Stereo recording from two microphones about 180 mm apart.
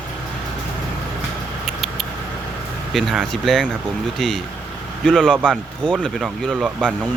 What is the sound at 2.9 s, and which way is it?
Speech, centre (ahead or behind).